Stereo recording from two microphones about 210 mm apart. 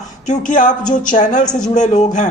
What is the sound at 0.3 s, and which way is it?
A woman's voice, 40° left (ahead or behind).